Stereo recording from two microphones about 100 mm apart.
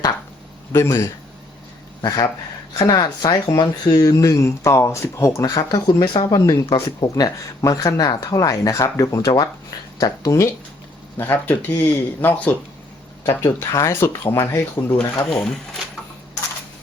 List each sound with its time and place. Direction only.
0.7 s speech: 25° left (ahead or behind)
2.0 s speech: 45° left (ahead or behind); by 5.5 s 30° left (ahead or behind)
5.5 s speech: 45° left (ahead or behind)
11.2 s speech: 20° left (ahead or behind)
13.2 s speech: 30° left (ahead or behind)